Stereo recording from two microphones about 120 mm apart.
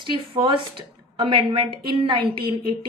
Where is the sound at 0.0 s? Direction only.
45° right (ahead or behind).